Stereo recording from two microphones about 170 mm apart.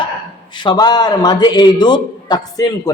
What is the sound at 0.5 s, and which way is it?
A man's voice, 25° left (ahead or behind).